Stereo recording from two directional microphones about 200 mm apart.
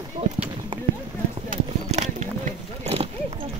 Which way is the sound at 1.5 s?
35° right (ahead or behind).